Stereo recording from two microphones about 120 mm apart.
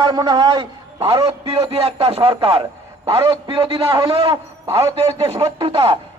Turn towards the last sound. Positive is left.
turn(degrees=-45)  # may be behind; listen again after turning